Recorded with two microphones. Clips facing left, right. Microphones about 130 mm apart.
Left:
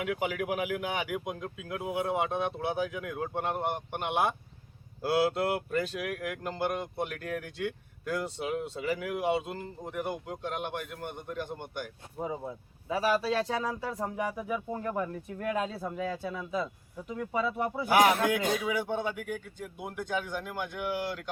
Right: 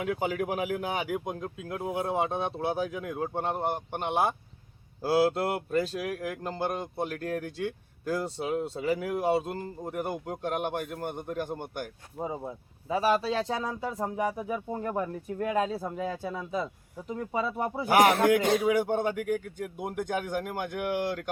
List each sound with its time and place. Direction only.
0.0 s speech: 35° right (ahead or behind)
12.4 s speech: 20° right (ahead or behind)
14.2 s speech: 30° right (ahead or behind)
18.1 s a man's voice: 65° right (ahead or behind)
18.6 s speech: 50° right (ahead or behind)